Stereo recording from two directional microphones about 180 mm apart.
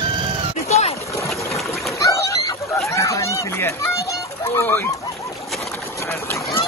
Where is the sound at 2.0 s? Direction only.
20° left (ahead or behind).